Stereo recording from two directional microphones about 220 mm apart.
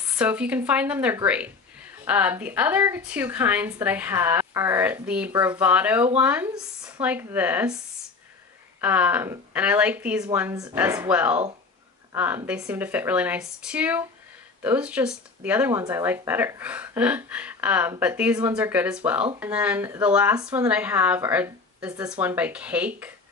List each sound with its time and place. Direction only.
0.1 s speech: 5° right (ahead or behind)
5.3 s speech: 15° right (ahead or behind)
5.6 s speech: 5° right (ahead or behind)
8.8 s speech: 5° right (ahead or behind)